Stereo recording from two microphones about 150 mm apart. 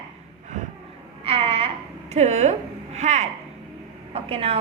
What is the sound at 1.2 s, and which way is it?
A woman's voice, 40° right (ahead or behind).